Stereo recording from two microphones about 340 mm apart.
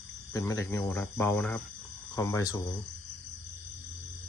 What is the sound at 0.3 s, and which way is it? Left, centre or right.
Speech, centre.